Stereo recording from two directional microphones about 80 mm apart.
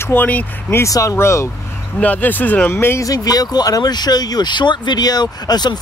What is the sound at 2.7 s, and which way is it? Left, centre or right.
Speech, left.